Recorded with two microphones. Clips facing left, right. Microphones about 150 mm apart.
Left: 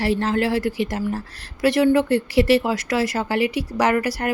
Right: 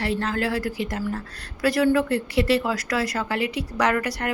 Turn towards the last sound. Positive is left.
turn(degrees=30)  # may be behind; listen again after turning